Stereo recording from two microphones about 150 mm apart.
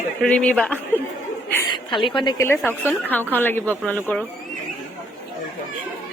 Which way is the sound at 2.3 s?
15° left (ahead or behind).